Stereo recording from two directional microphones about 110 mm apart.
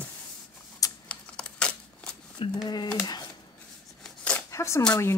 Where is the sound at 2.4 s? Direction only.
55° left (ahead or behind).